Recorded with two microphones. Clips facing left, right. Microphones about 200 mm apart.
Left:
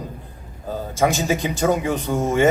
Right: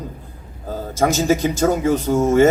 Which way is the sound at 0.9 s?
40° right (ahead or behind).